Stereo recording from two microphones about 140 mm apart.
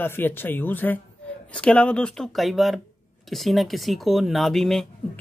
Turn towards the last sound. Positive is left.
turn(degrees=0)  # may be behind; listen again after turning